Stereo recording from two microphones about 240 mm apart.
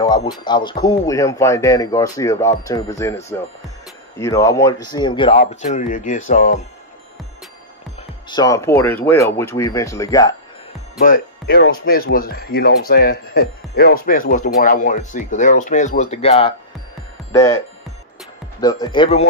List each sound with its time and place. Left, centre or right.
0.0 s a sound: centre
0.4 s speech: centre
4.2 s speech: centre
5.3 s speech: left
8.3 s speech: centre
11.0 s speech: left; by 17.6 s centre
18.6 s speech: centre